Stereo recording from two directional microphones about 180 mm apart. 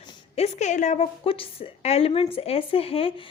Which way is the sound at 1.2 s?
30° left (ahead or behind).